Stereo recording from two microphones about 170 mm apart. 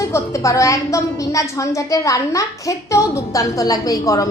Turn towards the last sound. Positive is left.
turn(degrees=20)  # may be behind; listen again after turning